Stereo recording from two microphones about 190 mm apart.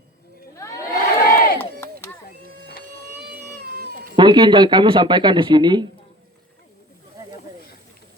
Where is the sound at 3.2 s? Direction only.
55° right (ahead or behind).